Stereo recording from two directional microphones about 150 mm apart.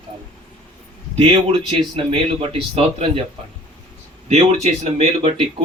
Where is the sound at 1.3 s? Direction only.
35° right (ahead or behind).